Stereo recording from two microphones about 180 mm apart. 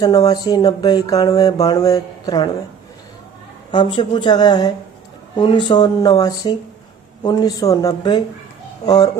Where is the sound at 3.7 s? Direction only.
25° left (ahead or behind).